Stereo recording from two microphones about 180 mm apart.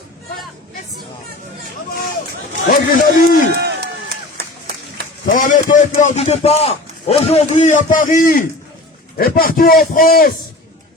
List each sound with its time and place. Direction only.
2.6 s speech: 55° left (ahead or behind)
3.5 s run: 65° right (ahead or behind)
5.3 s a man's voice: 45° left (ahead or behind)